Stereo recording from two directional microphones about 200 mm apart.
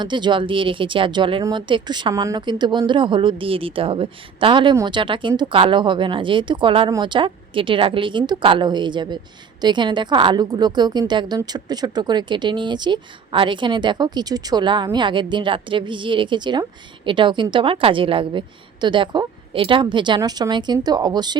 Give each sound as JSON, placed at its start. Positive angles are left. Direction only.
{"t": 0.0, "sound": "speech", "side_deg": -25}